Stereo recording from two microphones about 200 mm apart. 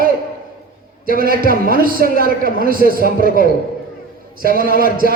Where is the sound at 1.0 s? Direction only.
45° right (ahead or behind).